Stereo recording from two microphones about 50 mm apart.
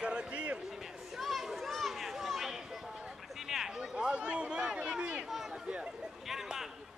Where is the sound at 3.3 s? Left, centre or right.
Centre.